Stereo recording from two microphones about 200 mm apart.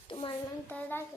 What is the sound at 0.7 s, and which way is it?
Child singing, 10° left (ahead or behind).